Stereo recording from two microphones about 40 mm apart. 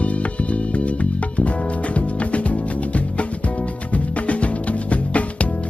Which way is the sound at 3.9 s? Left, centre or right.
Left.